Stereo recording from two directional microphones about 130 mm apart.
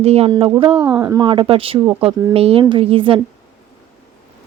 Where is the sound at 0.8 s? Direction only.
30° right (ahead or behind).